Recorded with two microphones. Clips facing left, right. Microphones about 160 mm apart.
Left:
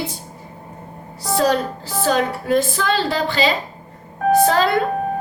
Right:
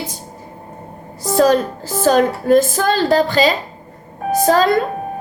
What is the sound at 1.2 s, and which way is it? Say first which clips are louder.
Speech: right 5 dB; 45° right (ahead or behind).